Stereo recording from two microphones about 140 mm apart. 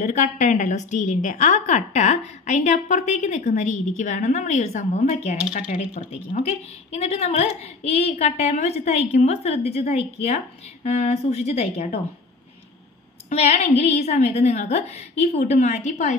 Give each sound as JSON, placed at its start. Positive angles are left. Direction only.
{"t": 0.0, "sound": "a woman's voice", "side_deg": 60}
{"t": 5.9, "sound": "a woman's voice", "side_deg": 45}
{"t": 13.3, "sound": "a woman's voice", "side_deg": 50}